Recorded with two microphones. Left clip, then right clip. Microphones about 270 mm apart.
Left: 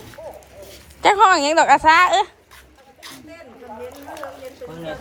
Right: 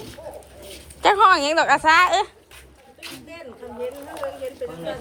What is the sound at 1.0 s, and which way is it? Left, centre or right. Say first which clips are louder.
Speech: left 2 dB; centre.